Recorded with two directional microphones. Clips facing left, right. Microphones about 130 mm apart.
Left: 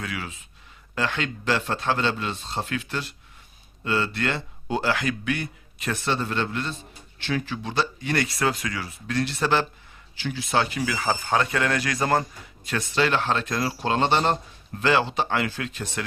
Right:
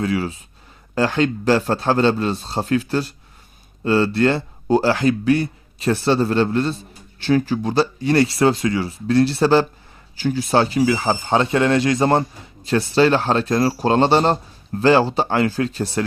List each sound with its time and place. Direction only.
0.0 s a man's voice: 35° right (ahead or behind)